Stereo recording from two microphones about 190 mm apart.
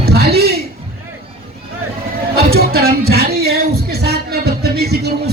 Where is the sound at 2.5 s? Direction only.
55° right (ahead or behind).